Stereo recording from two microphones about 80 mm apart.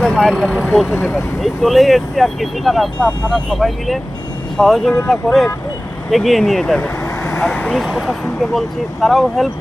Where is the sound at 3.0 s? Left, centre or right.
Centre.